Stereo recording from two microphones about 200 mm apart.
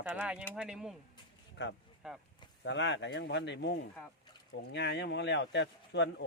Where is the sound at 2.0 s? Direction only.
5° right (ahead or behind).